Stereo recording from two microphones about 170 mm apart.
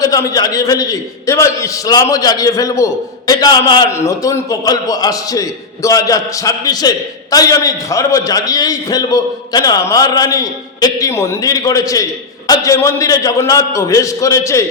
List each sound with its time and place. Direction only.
0.0 s a man's voice: 20° left (ahead or behind)